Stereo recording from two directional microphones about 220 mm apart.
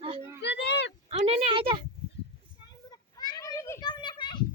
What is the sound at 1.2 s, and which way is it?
Speech, 25° right (ahead or behind).